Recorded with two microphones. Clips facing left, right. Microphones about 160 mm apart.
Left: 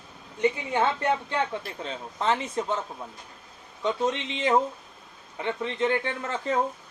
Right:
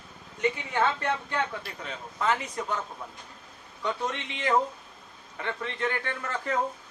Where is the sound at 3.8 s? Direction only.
20° left (ahead or behind).